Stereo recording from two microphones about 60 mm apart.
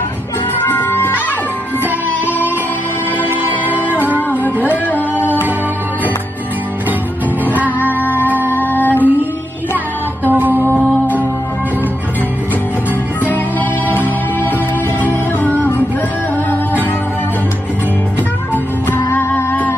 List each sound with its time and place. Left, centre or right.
0.6 s music: left
3.2 s music: left
3.9 s music: right
4.6 s music: left
7.4 s music: right
8.0 s music: left
10.2 s music: right
13.8 s music: left
18.5 s music: left